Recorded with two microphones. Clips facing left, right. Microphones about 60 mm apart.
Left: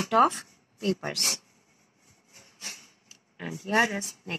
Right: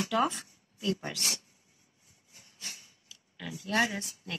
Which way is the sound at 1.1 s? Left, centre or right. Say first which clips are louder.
Left 3 dB; left.